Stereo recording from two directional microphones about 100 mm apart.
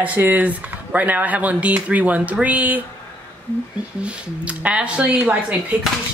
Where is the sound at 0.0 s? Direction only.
15° right (ahead or behind).